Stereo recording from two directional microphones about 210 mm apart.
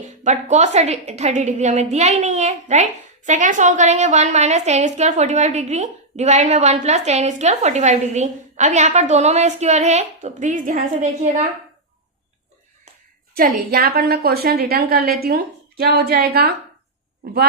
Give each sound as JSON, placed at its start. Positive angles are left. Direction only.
{"t": 0.0, "sound": "a woman's voice", "side_deg": -35}
{"t": 13.3, "sound": "a woman's voice", "side_deg": -45}